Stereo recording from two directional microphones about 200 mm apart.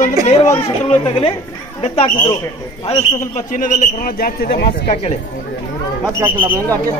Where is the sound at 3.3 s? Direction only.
40° left (ahead or behind).